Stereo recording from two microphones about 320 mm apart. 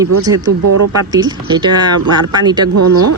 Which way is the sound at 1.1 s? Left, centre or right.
Centre.